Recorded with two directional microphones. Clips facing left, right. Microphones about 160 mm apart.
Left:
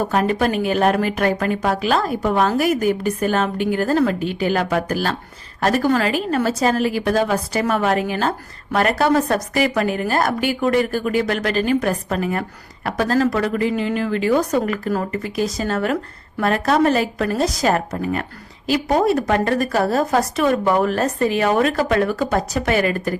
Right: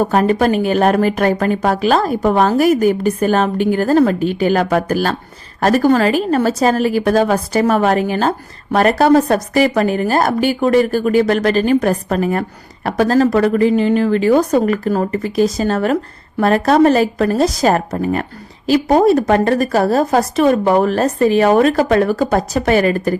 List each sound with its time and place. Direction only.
0.0 s speech: 40° right (ahead or behind)